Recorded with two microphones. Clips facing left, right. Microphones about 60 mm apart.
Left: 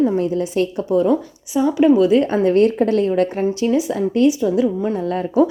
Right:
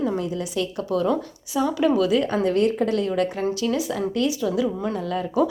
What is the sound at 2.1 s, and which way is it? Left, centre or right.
Speech, left.